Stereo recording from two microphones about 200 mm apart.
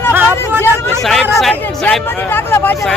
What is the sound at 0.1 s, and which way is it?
Vehicle, 10° right (ahead or behind).